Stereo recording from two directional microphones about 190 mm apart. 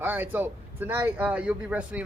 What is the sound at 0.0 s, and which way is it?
A man's voice, 10° right (ahead or behind).